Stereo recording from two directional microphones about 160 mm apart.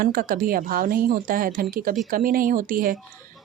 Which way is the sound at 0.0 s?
65° right (ahead or behind).